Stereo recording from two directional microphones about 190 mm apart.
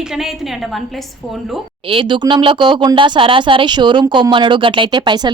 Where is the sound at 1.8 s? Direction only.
25° right (ahead or behind).